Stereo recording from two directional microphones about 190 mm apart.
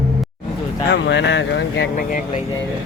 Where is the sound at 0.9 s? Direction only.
65° left (ahead or behind).